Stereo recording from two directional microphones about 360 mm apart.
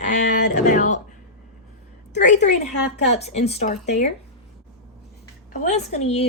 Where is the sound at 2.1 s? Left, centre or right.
Left.